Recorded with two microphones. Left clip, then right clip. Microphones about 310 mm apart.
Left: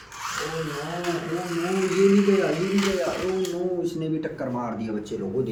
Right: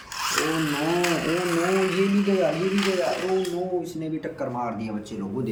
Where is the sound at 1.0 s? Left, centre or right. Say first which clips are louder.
Right 4 dB; right.